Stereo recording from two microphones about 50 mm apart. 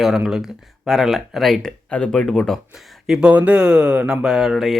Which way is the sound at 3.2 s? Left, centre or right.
Right.